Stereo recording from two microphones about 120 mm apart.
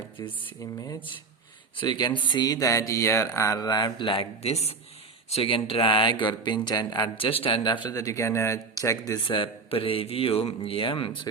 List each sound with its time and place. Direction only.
0.2 s speech: 30° left (ahead or behind)
1.7 s speech: 40° left (ahead or behind)
7.2 s speech: 50° left (ahead or behind)
7.9 s speech: 25° left (ahead or behind)
9.2 s speech: 45° left (ahead or behind)